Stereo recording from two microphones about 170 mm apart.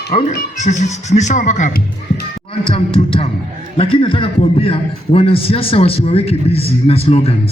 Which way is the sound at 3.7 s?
35° left (ahead or behind).